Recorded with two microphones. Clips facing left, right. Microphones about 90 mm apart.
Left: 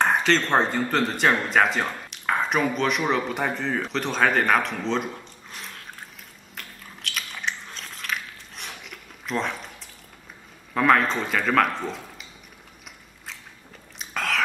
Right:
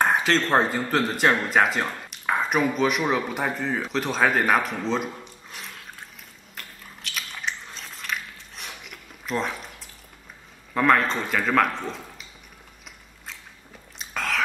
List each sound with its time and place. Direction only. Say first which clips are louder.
0.0 s speech: even; 5° right (ahead or behind)
6.5 s biting: left 1 dB; centre (ahead or behind)
10.7 s speech: left 1 dB; centre (ahead or behind)
13.9 s whispering: left 1 dB; centre (ahead or behind)